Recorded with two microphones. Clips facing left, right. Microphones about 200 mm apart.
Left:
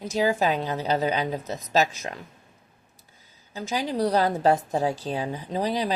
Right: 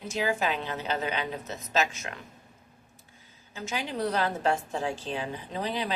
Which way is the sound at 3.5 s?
35° left (ahead or behind).